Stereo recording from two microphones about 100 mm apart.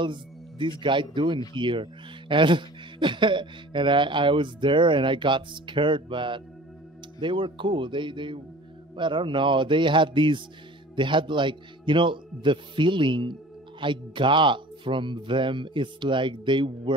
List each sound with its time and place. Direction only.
0.0 s a man's voice: 55° right (ahead or behind)